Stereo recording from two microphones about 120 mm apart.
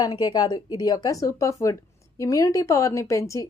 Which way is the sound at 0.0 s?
35° left (ahead or behind).